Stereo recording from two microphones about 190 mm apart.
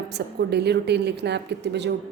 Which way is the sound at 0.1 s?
60° right (ahead or behind).